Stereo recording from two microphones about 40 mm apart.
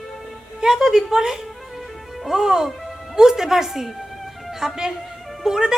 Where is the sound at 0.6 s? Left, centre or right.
Centre.